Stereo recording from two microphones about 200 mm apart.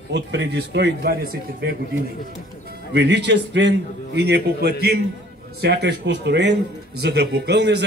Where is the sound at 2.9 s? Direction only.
60° right (ahead or behind).